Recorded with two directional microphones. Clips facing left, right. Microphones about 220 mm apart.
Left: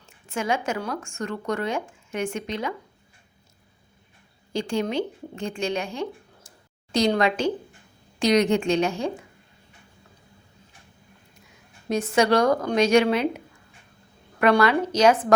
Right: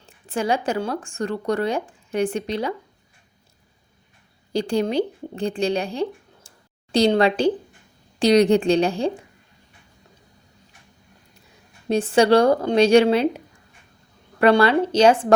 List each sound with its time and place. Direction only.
0.0 s a woman's voice: 35° right (ahead or behind)
4.5 s a woman's voice: 35° right (ahead or behind)
11.9 s a woman's voice: 30° right (ahead or behind)